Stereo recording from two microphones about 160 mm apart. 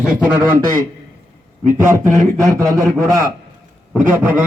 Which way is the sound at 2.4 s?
20° right (ahead or behind).